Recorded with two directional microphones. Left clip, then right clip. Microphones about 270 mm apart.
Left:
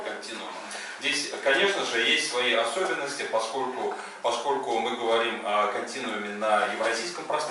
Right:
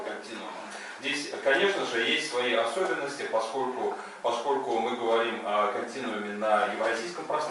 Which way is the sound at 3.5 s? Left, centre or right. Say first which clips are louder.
Left 1 dB; centre.